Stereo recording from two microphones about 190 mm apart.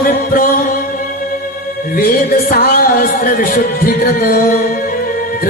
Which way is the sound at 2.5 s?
50° left (ahead or behind).